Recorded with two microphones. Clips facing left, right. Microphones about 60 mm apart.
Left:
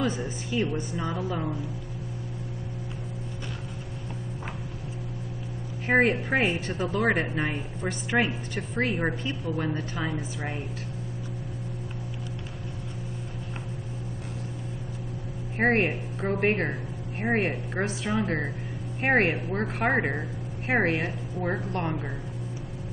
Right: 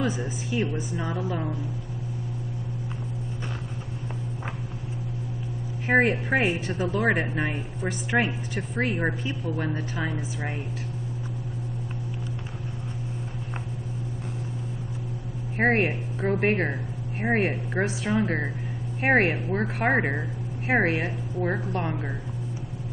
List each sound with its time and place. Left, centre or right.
0.0 s a woman's voice: centre
5.9 s a woman's voice: centre
15.5 s a woman's voice: centre